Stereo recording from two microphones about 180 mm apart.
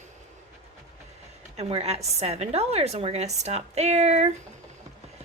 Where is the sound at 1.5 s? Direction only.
35° right (ahead or behind).